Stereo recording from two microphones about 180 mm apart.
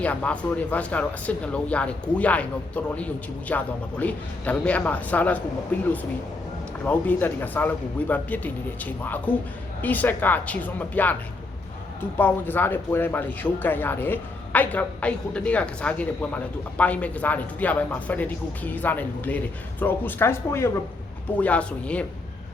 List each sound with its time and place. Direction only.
0.0 s speech: 10° left (ahead or behind)